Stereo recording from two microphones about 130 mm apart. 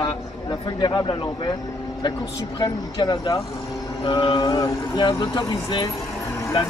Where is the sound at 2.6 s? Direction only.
35° left (ahead or behind).